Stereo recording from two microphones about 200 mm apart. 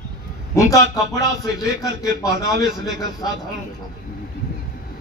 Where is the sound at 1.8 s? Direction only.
15° left (ahead or behind).